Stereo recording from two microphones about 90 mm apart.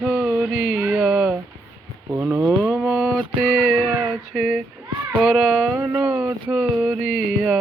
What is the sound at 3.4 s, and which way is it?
Music, centre (ahead or behind).